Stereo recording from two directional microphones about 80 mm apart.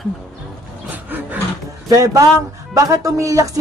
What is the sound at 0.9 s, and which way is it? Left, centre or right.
Rub, right.